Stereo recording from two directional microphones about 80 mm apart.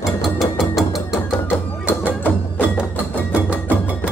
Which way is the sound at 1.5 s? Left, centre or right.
Left.